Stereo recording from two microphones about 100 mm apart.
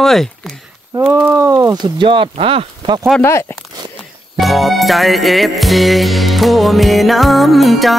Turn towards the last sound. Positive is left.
turn(degrees=0)  # may be behind; listen again after turning